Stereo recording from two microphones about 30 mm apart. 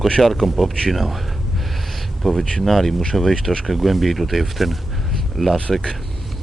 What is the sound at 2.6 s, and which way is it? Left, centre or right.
Speech, centre.